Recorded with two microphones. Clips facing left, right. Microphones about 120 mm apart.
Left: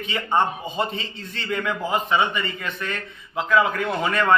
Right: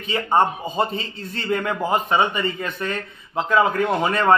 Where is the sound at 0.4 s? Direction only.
35° right (ahead or behind).